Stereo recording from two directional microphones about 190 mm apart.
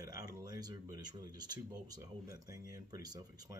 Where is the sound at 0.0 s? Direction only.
20° right (ahead or behind).